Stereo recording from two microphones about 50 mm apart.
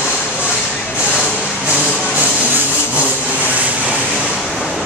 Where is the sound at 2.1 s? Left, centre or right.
Right.